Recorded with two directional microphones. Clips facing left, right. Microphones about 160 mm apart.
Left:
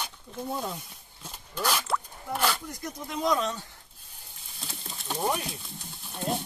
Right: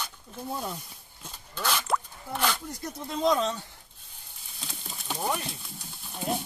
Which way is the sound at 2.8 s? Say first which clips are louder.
Right 3 dB; 20° right (ahead or behind).